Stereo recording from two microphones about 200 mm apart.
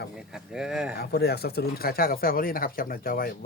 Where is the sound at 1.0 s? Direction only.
55° left (ahead or behind).